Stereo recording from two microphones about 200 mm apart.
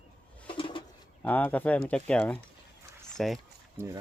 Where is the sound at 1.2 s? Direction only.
10° left (ahead or behind).